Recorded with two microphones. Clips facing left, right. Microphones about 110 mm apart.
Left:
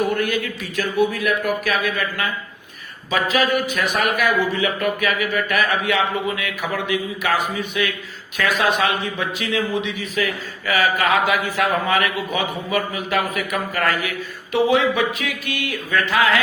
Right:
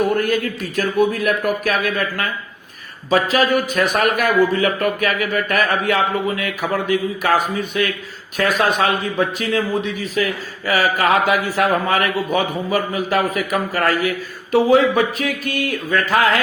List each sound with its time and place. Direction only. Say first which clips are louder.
0.2 s a man's voice: right 3 dB; 40° right (ahead or behind)